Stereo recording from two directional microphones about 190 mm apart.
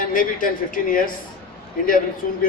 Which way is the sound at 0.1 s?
45° left (ahead or behind).